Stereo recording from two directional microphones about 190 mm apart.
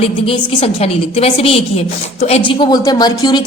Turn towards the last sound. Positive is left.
turn(degrees=20)  # may be behind; listen again after turning